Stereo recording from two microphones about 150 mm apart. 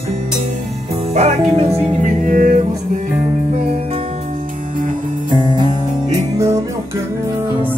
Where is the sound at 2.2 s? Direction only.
60° right (ahead or behind).